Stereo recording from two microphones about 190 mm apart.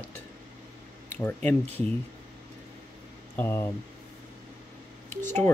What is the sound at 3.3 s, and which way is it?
Speech, 10° left (ahead or behind).